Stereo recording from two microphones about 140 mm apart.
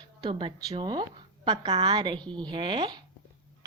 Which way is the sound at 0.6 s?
30° right (ahead or behind).